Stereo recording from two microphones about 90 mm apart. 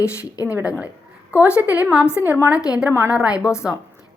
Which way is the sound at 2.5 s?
40° left (ahead or behind).